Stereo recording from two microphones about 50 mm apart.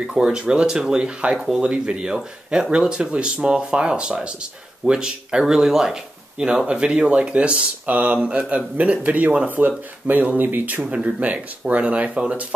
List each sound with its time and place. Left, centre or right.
0.0 s speech: centre
7.8 s speech: right
11.0 s speech: right